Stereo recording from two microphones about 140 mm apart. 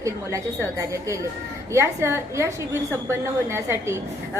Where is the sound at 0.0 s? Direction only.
20° right (ahead or behind).